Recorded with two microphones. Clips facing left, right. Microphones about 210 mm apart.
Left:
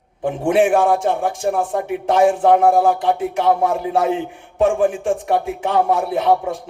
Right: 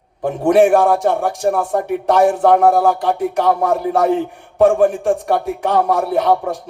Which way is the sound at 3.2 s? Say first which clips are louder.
Right 1 dB; 40° right (ahead or behind).